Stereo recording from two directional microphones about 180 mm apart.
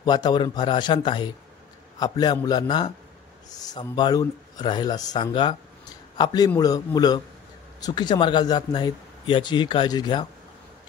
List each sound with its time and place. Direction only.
0.0 s a man's voice: 25° left (ahead or behind)